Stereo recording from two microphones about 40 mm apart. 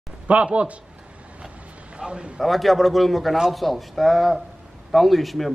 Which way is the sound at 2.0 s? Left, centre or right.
Right.